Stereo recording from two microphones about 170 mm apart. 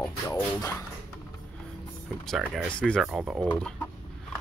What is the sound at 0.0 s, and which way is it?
Music, 20° left (ahead or behind).